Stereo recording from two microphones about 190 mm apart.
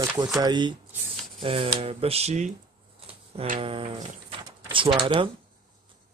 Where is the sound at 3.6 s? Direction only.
30° right (ahead or behind).